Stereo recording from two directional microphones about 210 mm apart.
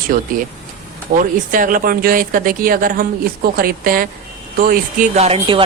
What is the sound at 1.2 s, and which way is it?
Speech, 40° right (ahead or behind).